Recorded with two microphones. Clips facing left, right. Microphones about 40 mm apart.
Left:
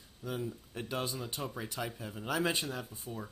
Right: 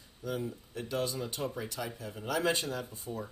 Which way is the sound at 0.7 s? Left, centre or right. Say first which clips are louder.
Right 3 dB; left.